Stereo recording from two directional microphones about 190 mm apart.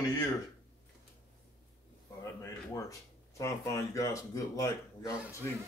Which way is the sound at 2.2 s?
15° left (ahead or behind).